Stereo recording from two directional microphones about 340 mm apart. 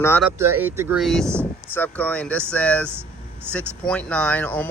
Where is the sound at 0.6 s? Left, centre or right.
Centre.